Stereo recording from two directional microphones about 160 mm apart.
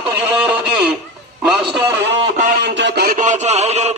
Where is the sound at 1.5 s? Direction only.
5° right (ahead or behind).